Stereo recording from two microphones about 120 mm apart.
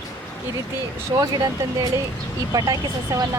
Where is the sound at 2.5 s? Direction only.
35° right (ahead or behind).